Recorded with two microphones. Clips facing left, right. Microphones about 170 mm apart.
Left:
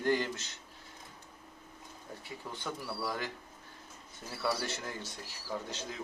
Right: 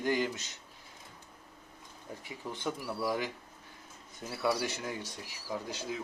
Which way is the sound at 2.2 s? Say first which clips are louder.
Right 4 dB; 15° right (ahead or behind).